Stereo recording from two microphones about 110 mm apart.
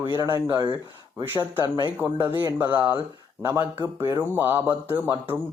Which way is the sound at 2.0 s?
20° right (ahead or behind).